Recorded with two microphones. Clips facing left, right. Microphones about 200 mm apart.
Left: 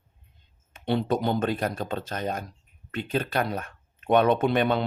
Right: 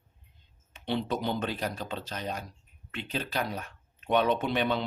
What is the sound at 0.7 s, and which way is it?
Speech, 50° left (ahead or behind).